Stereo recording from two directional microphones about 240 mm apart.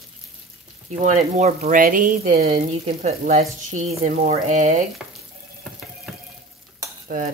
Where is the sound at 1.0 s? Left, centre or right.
Right.